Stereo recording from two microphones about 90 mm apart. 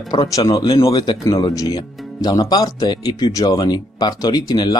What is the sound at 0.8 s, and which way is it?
Speech, 50° left (ahead or behind).